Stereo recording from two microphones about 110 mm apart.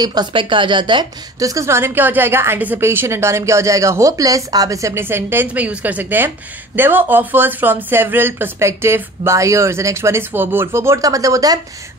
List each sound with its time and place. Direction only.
0.0 s speech: 40° right (ahead or behind)
1.4 s a woman's voice: 30° right (ahead or behind)